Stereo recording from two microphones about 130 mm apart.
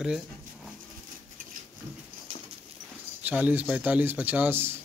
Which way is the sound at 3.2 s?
15° right (ahead or behind).